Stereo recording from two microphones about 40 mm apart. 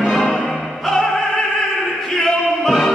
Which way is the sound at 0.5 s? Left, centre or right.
Centre.